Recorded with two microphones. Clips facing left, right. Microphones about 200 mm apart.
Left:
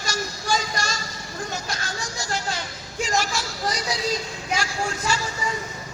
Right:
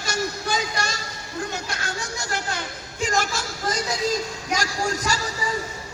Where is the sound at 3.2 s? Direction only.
50° right (ahead or behind).